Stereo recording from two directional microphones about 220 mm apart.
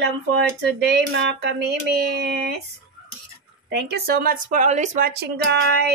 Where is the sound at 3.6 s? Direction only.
50° right (ahead or behind).